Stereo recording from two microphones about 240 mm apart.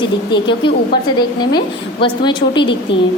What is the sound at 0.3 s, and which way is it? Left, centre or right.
A woman's voice, centre.